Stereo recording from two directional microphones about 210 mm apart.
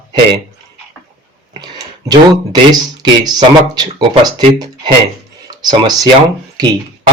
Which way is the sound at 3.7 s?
20° right (ahead or behind).